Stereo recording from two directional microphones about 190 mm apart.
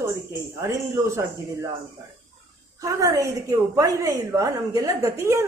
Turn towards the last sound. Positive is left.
turn(degrees=-15)  # may be behind; listen again after turning